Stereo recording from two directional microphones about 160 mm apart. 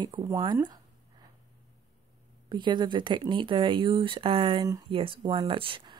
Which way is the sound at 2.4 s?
30° right (ahead or behind).